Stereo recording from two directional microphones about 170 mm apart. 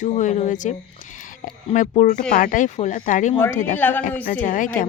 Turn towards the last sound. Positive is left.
turn(degrees=50)  # may be behind; listen again after turning